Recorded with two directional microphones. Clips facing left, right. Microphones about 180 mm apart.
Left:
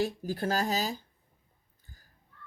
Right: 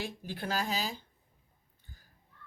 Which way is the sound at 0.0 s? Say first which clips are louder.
Left 8 dB; 40° left (ahead or behind).